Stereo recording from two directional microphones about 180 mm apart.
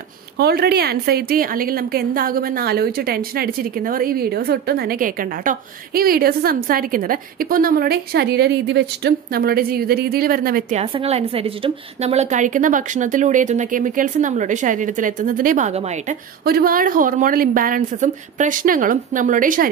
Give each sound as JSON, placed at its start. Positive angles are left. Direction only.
{"t": 0.4, "sound": "a woman's voice", "side_deg": -60}
{"t": 10.8, "sound": "a woman's voice", "side_deg": -35}
{"t": 16.4, "sound": "a woman's voice", "side_deg": -55}